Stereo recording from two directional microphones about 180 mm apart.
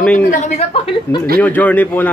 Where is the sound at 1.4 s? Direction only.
10° left (ahead or behind).